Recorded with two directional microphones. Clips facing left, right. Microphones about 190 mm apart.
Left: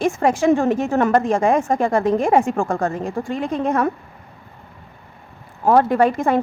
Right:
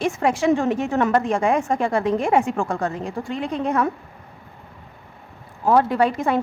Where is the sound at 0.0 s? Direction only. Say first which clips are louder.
Left 3 dB; 45° left (ahead or behind).